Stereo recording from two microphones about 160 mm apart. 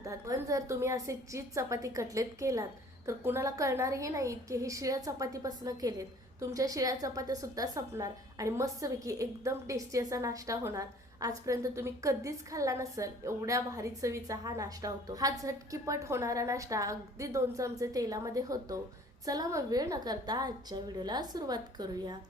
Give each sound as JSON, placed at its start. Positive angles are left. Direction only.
{"t": 0.0, "sound": "a woman's voice", "side_deg": -20}